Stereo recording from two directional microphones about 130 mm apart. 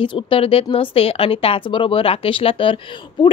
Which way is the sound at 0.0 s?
40° left (ahead or behind).